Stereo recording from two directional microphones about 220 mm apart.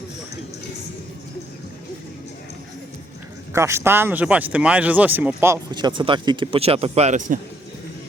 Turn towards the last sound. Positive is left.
turn(degrees=-35)  # may be behind; listen again after turning